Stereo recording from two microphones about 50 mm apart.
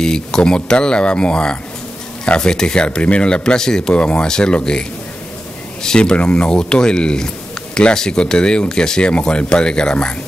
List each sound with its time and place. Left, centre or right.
0.0 s speech: centre